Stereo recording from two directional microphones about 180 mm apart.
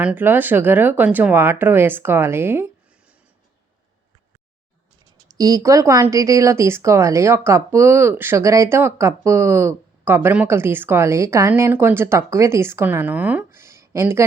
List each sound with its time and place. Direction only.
0.0 s speech: 10° right (ahead or behind)
5.4 s speech: 20° right (ahead or behind)